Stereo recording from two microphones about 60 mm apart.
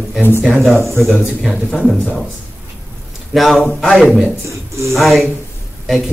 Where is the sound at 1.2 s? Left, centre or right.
Centre.